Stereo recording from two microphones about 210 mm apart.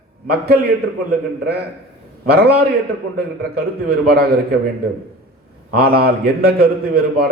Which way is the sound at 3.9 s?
50° right (ahead or behind).